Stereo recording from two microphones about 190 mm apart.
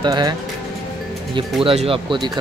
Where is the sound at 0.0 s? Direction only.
20° right (ahead or behind).